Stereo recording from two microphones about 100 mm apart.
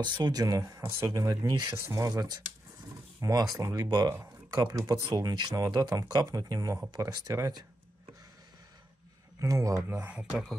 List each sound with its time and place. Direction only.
0.0 s speech: 45° right (ahead or behind)
9.4 s speech: 35° right (ahead or behind)
10.0 s speech: 10° right (ahead or behind)